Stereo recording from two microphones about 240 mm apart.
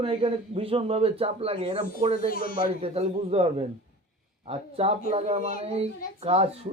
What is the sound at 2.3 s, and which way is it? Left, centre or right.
Speech, left.